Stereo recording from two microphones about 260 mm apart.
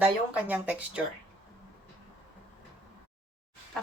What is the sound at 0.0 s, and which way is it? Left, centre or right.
Speech, centre.